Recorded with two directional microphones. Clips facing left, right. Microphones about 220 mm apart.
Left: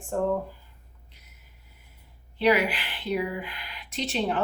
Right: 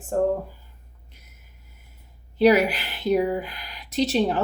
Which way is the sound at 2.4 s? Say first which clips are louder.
Right 5 dB; 40° right (ahead or behind).